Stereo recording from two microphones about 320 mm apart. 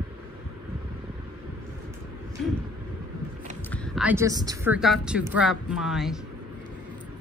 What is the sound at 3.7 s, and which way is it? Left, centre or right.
Speech, centre.